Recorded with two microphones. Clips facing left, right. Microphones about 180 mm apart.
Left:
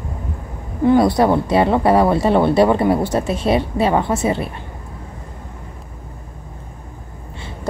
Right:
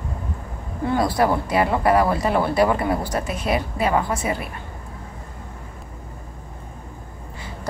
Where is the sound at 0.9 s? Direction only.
25° left (ahead or behind).